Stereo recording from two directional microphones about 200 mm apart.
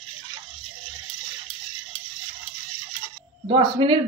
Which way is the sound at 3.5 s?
25° right (ahead or behind).